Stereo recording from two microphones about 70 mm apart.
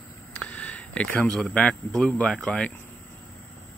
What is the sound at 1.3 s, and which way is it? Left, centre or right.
Speech, centre.